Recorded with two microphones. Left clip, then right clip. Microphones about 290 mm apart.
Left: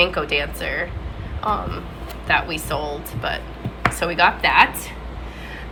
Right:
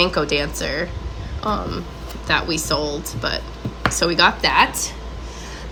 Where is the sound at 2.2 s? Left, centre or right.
Centre.